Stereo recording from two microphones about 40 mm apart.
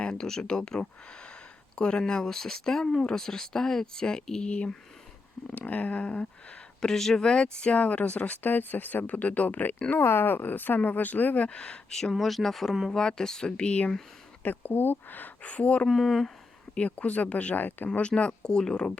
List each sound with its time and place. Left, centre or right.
0.2 s speech: centre
2.2 s speech: centre
5.5 s speech: left
6.8 s speech: centre; by 8.4 s left
8.4 s speech: left
10.0 s speech: left
11.4 s speech: left
12.1 s speech: centre
12.9 s speech: centre
14.4 s speech: left
15.4 s speech: left
15.9 s speech: centre
16.7 s speech: left
18.1 s speech: left